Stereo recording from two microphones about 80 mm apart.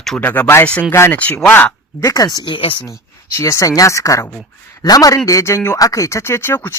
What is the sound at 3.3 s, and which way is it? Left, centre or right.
Speech, left.